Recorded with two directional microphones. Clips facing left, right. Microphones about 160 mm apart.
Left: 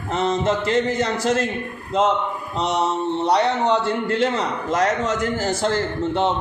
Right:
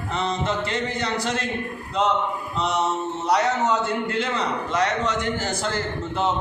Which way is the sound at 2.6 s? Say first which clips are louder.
Left 3 dB; 35° left (ahead or behind).